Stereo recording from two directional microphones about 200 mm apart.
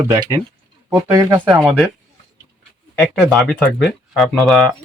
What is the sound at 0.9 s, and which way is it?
Speech, 15° right (ahead or behind).